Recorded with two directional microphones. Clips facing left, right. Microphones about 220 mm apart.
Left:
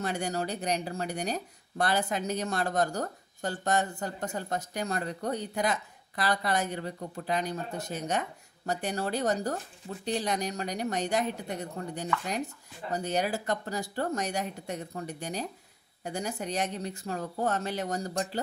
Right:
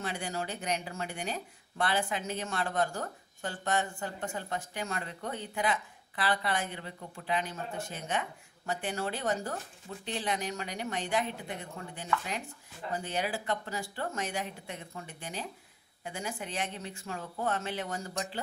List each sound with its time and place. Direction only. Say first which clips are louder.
0.0 s speech: left 5 dB; 45° left (ahead or behind)